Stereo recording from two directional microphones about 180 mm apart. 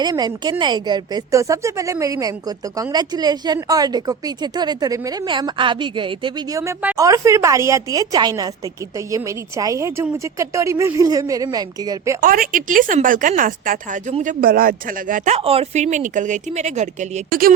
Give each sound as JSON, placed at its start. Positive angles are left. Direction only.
{"t": 0.0, "sound": "a woman's voice", "side_deg": -20}
{"t": 12.2, "sound": "speech", "side_deg": -50}